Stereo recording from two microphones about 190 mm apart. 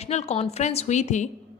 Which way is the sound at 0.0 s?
35° left (ahead or behind).